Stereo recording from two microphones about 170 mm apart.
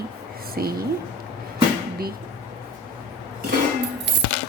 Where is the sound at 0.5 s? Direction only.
60° right (ahead or behind).